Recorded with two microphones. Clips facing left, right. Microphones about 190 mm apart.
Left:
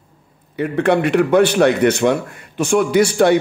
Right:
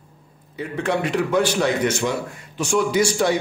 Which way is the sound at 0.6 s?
65° left (ahead or behind).